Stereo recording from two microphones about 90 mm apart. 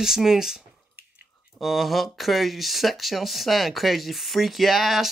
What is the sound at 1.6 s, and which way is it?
Speech, centre (ahead or behind).